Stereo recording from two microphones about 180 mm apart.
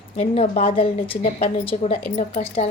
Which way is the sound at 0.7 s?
30° left (ahead or behind).